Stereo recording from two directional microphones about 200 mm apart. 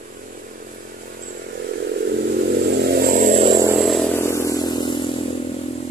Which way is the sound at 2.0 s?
50° right (ahead or behind).